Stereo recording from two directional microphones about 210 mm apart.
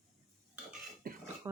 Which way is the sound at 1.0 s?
45° right (ahead or behind).